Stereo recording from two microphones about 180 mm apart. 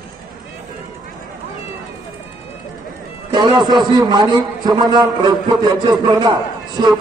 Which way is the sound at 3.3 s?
25° right (ahead or behind).